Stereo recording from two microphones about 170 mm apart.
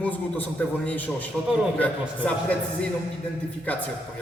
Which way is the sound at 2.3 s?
5° left (ahead or behind).